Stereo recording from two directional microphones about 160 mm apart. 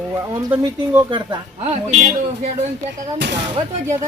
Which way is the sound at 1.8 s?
45° right (ahead or behind).